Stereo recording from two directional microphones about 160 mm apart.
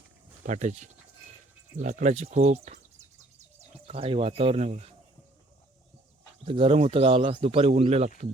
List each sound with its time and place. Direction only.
0.4 s speech: 50° right (ahead or behind)
3.8 s speech: 35° right (ahead or behind)
6.4 s speech: 35° right (ahead or behind)